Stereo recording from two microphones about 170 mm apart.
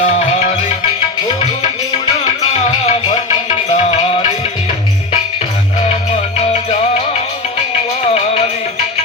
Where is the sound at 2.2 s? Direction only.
40° left (ahead or behind).